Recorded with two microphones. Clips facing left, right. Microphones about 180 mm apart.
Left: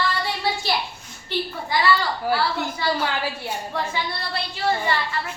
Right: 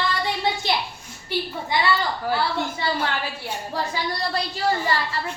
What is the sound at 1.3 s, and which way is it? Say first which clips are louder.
A woman's voice: even; 10° right (ahead or behind).